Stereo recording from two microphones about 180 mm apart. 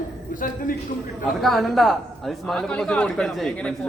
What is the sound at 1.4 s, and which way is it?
A man's voice, centre (ahead or behind).